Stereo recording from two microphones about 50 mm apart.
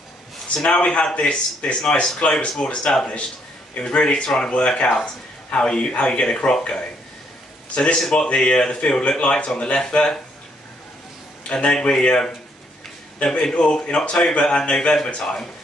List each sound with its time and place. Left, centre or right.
0.6 s a man's voice: centre
11.5 s a man's voice: centre